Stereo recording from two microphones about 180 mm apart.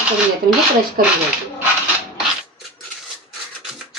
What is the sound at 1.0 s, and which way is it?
Speech, 55° right (ahead or behind).